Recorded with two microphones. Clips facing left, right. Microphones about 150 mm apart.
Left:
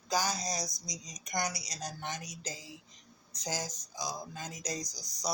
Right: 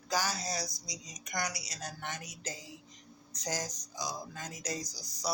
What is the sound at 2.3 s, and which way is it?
Speech, 30° left (ahead or behind).